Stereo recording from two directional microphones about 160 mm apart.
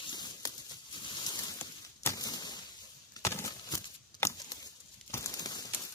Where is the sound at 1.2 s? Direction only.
25° left (ahead or behind).